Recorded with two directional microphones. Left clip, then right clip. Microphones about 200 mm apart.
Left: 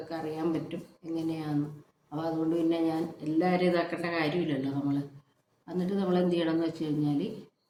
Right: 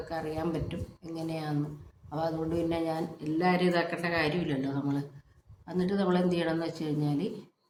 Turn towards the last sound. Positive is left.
turn(degrees=-15)  # may be behind; listen again after turning